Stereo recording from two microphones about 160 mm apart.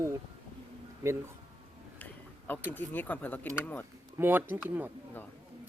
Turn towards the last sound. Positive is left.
turn(degrees=-10)  # may be behind; listen again after turning